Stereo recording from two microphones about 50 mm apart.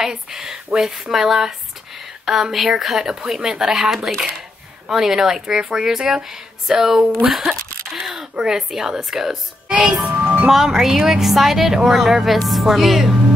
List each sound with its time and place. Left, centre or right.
0.0 s speech: centre
10.0 s speech: right
10.5 s a woman's voice: centre